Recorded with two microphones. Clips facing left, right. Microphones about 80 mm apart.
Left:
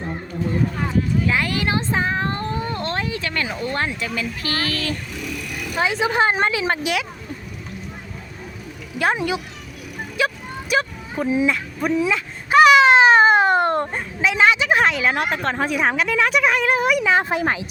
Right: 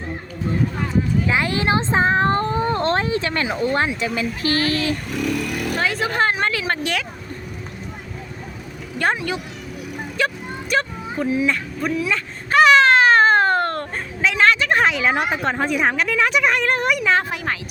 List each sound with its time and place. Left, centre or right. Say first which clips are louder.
1.3 s cat: right 2 dB; right
4.0 s speech: right 4 dB; right
5.1 s speech: right 7 dB; right
5.8 s speech: left 3 dB; centre
10.2 s vehicle: even; centre
11.4 s speech: left 1 dB; centre
12.1 s a sound: left 1 dB; centre
14.8 s speech: even; centre
17.2 s a woman's voice: left 4 dB; left